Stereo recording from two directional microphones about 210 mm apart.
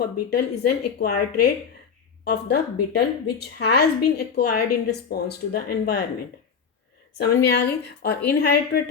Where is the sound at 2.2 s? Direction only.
50° left (ahead or behind).